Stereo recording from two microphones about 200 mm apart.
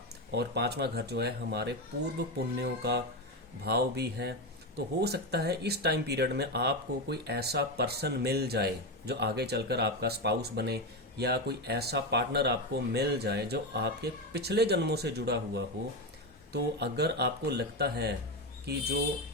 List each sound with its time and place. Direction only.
0.3 s speech: 55° right (ahead or behind)